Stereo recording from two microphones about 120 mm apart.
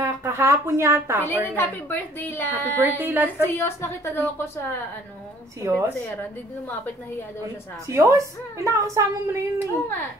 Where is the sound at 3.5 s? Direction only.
20° left (ahead or behind).